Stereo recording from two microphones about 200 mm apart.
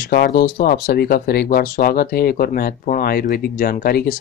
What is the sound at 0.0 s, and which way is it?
Speech, 55° left (ahead or behind).